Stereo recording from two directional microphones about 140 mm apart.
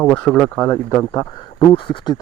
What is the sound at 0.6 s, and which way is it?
Speech, 20° left (ahead or behind).